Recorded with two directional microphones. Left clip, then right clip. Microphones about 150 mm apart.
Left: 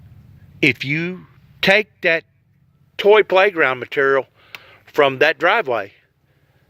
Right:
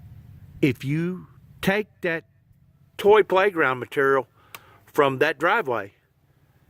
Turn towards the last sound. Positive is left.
turn(degrees=-35)  # may be behind; listen again after turning